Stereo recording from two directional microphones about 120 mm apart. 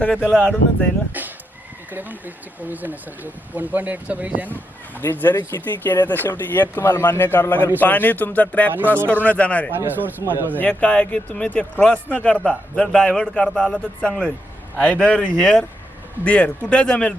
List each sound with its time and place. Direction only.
0.0 s speech: 10° left (ahead or behind)
1.9 s speech: 15° right (ahead or behind)
4.4 s a man's voice: 15° left (ahead or behind)
9.7 s speech: 15° right (ahead or behind)
10.6 s a man's voice: 10° left (ahead or behind)